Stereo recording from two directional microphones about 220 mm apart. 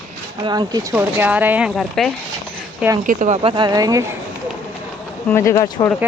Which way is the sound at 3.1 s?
35° right (ahead or behind).